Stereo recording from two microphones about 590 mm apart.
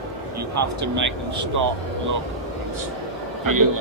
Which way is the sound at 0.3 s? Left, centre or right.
Right.